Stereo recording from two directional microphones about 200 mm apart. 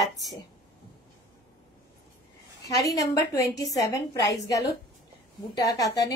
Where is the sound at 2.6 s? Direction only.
15° left (ahead or behind).